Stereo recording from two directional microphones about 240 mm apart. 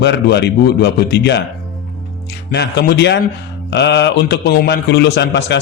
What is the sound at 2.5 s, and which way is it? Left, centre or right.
A man's voice, left.